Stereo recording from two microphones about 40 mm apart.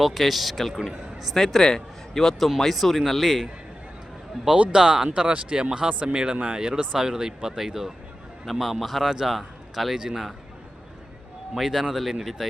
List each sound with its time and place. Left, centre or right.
0.0 s a man's voice: centre
1.5 s a man's voice: centre
4.5 s speech: right
5.0 s speech: right
7.0 s a man's voice: centre
11.5 s a man's voice: centre